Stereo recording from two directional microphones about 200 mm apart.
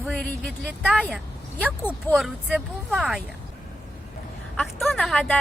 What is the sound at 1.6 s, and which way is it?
Speech, 10° left (ahead or behind).